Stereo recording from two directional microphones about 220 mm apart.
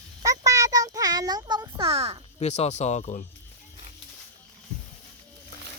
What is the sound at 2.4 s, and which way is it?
Speech, 30° left (ahead or behind).